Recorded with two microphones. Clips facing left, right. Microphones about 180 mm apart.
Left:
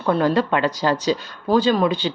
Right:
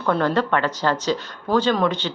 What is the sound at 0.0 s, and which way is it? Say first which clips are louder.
Speech: left 2 dB; 10° left (ahead or behind).